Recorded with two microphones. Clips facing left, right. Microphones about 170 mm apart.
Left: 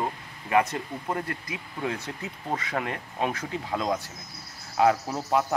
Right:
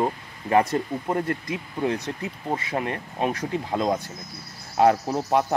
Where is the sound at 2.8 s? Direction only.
20° right (ahead or behind).